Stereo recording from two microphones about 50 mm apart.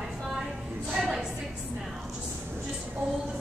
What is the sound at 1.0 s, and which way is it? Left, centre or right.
Speech, centre.